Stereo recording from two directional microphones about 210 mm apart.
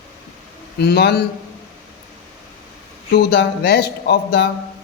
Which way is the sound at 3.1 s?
50° left (ahead or behind).